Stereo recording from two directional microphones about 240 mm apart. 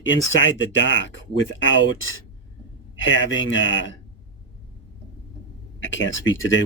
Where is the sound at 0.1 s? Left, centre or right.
Left.